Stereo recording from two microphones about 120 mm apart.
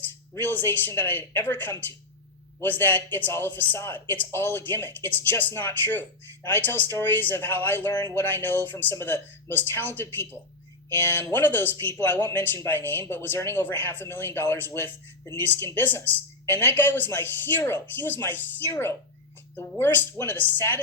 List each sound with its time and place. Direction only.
0.1 s speech: 20° left (ahead or behind)